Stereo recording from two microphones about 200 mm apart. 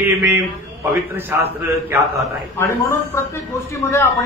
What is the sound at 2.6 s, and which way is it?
A man's voice, 15° left (ahead or behind).